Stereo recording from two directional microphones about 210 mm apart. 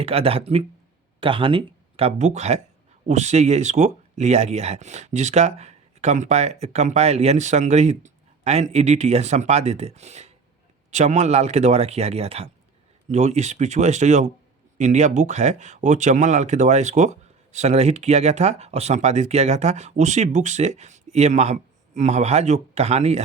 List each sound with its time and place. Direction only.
0.0 s speech: 30° right (ahead or behind)